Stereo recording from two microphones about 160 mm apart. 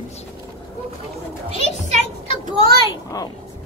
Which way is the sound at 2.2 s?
35° left (ahead or behind).